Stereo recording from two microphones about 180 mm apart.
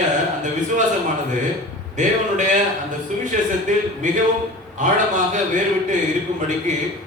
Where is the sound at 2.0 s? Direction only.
40° right (ahead or behind).